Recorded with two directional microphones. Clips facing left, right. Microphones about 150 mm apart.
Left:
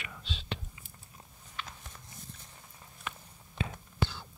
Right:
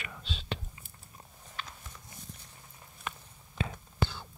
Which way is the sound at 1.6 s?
40° right (ahead or behind).